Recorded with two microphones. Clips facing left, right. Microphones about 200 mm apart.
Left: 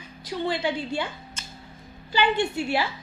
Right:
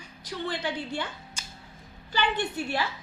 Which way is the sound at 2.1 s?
10° left (ahead or behind).